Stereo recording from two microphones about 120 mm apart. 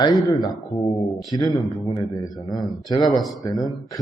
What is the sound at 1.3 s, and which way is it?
A man's voice, 30° left (ahead or behind).